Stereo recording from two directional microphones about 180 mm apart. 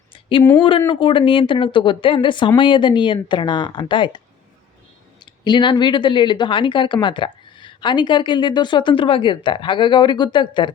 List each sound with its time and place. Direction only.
0.1 s a sound: 30° left (ahead or behind)
0.9 s speech: 30° left (ahead or behind)
5.2 s speech: 25° left (ahead or behind)